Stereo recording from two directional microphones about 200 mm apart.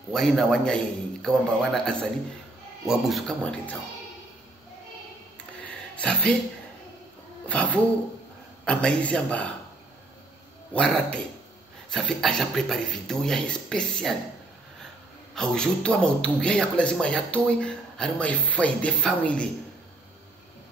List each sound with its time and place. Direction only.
0.1 s a man's voice: centre (ahead or behind)
5.6 s a sound: 5° left (ahead or behind)
7.4 s a man's voice: 5° left (ahead or behind)
10.7 s a man's voice: 5° left (ahead or behind)
15.3 s a man's voice: 5° left (ahead or behind)